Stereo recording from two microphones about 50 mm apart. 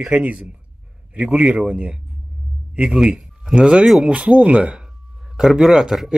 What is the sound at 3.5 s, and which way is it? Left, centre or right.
Speech, right.